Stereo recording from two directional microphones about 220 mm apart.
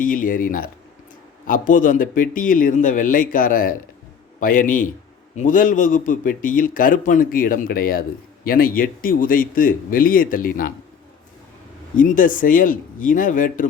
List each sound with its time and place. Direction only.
0.0 s speech: 40° left (ahead or behind)
11.9 s speech: 35° left (ahead or behind)